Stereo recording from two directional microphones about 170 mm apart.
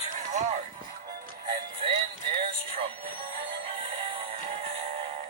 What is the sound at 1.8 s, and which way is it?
Music, 30° right (ahead or behind).